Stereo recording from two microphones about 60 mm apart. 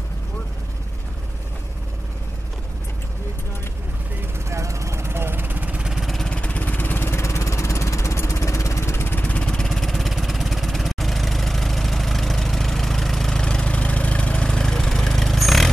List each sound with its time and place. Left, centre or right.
4.5 s vehicle: right
5.8 s vehicle: centre
6.2 s vehicle: centre; by 9.1 s left
9.1 s vehicle: left
9.5 s vehicle: centre